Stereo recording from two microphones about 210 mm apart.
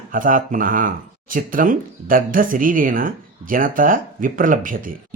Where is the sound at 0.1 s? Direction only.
40° right (ahead or behind).